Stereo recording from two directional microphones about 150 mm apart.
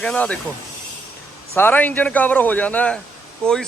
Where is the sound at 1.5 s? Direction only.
10° left (ahead or behind).